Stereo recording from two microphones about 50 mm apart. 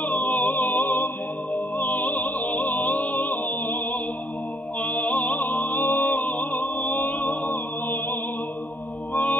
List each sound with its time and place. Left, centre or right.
0.0 s music: left
4.8 s music: left